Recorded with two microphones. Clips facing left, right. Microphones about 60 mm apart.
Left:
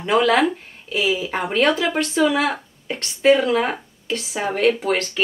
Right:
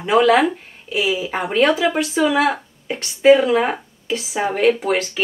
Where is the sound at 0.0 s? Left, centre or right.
Centre.